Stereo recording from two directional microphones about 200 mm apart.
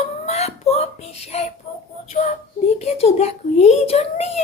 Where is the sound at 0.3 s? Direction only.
30° left (ahead or behind).